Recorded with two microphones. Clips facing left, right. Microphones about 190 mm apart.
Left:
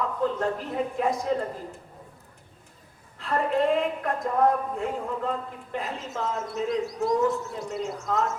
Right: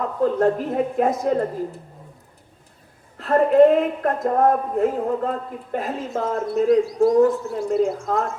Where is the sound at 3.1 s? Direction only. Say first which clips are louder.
Right 11 dB; 45° right (ahead or behind).